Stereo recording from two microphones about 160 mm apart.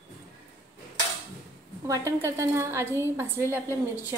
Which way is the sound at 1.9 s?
15° right (ahead or behind).